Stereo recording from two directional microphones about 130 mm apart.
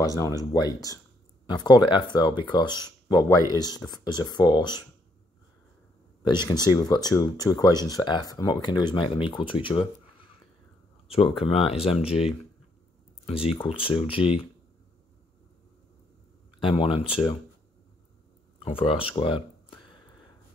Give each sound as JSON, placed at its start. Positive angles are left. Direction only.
{"t": 0.0, "sound": "speech", "side_deg": 25}
{"t": 6.2, "sound": "speech", "side_deg": 35}
{"t": 11.1, "sound": "speech", "side_deg": 45}
{"t": 13.7, "sound": "speech", "side_deg": 40}
{"t": 16.6, "sound": "speech", "side_deg": 45}
{"t": 18.6, "sound": "speech", "side_deg": 45}